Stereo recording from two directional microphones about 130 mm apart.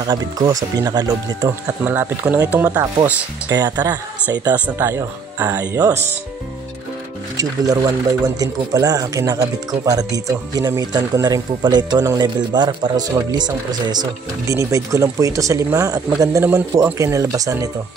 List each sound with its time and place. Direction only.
0.0 s speech: 30° right (ahead or behind)
1.9 s speech: 15° right (ahead or behind)
3.4 s speech: 30° right (ahead or behind)
7.3 s speech: 30° right (ahead or behind)